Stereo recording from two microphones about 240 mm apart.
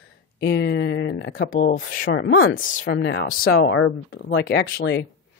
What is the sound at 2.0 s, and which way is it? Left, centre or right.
Speech, left.